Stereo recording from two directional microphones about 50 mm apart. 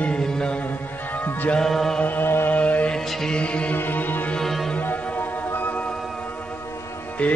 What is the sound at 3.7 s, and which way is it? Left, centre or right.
Music, left.